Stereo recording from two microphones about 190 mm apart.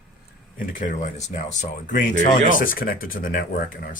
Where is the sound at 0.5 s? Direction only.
45° left (ahead or behind).